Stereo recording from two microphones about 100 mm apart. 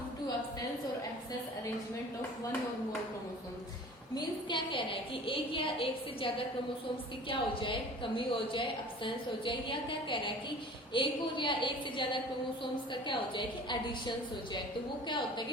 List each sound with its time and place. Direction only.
4.1 s a woman's voice: 50° left (ahead or behind)